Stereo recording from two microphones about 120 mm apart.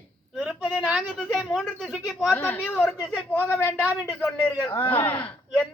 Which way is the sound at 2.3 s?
15° left (ahead or behind).